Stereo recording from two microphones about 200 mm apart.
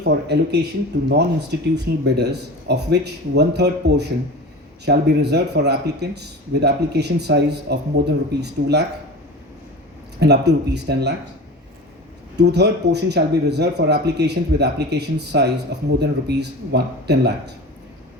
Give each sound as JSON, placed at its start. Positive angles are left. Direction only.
{"t": 0.0, "sound": "speech", "side_deg": -55}
{"t": 10.2, "sound": "speech", "side_deg": -55}
{"t": 12.4, "sound": "speech", "side_deg": -55}